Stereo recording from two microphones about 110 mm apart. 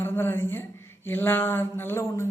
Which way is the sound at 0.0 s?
20° left (ahead or behind).